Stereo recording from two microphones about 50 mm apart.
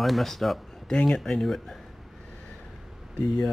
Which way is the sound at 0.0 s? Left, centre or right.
Centre.